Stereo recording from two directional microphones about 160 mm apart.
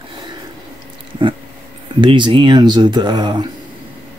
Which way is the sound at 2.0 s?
30° right (ahead or behind).